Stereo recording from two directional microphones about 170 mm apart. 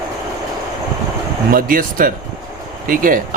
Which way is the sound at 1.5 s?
55° right (ahead or behind).